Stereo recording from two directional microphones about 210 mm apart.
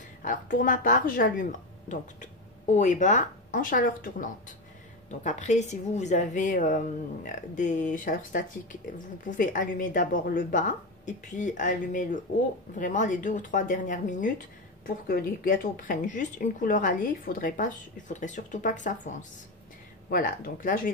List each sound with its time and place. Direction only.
0.2 s a woman's voice: 40° left (ahead or behind)